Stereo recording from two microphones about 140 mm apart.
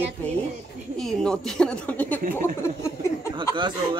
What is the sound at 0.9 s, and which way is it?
Speech, 5° left (ahead or behind).